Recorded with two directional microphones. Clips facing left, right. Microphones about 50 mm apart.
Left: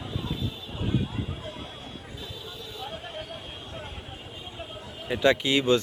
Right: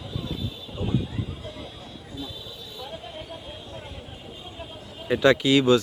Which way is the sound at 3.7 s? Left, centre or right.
Left.